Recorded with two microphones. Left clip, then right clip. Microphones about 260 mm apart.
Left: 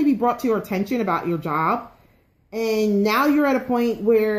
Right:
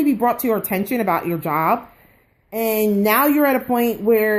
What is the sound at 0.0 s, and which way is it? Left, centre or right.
Speech, right.